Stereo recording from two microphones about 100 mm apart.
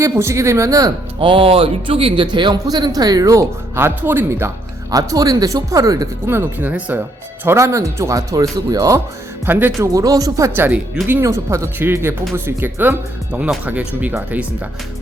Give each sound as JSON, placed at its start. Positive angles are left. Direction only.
{"t": 0.0, "sound": "speech", "side_deg": -30}
{"t": 1.2, "sound": "speech", "side_deg": -65}
{"t": 2.2, "sound": "speech", "side_deg": -50}
{"t": 6.2, "sound": "speech", "side_deg": -20}
{"t": 7.4, "sound": "speech", "side_deg": -30}
{"t": 9.5, "sound": "speech", "side_deg": -20}
{"t": 9.9, "sound": "speech", "side_deg": -35}